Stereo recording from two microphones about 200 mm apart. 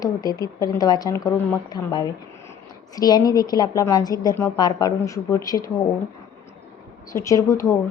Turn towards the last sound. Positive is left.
turn(degrees=15)  # may be behind; listen again after turning